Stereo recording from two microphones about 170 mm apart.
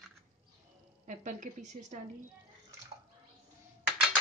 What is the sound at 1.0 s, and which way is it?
Speech, 45° right (ahead or behind).